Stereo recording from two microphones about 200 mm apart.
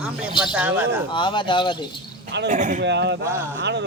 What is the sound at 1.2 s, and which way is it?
Speech, 25° left (ahead or behind).